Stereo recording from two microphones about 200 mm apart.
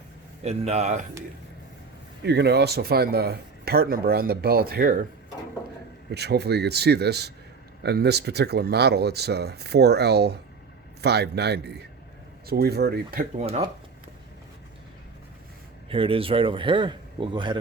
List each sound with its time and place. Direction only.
0.4 s speech: 35° right (ahead or behind)
2.2 s speech: 55° right (ahead or behind)
6.1 s speech: 55° right (ahead or behind)
13.4 s speech: 30° right (ahead or behind)
15.9 s speech: 25° right (ahead or behind)